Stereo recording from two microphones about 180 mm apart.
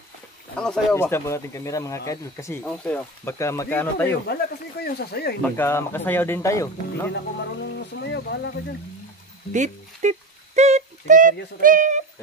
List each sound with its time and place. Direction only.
0.6 s speech: 10° left (ahead or behind)
2.6 s speech: 5° left (ahead or behind)
4.3 s speech: 60° left (ahead or behind)
5.4 s speech: 15° left (ahead or behind)
7.1 s speech: 70° left (ahead or behind)
9.5 s a sound: 40° right (ahead or behind)
11.6 s speech: 45° right (ahead or behind)